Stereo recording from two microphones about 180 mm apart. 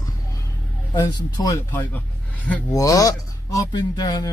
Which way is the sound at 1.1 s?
20° left (ahead or behind).